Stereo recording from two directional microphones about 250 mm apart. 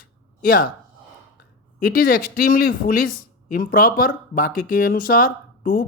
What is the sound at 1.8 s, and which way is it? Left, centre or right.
Speech, left.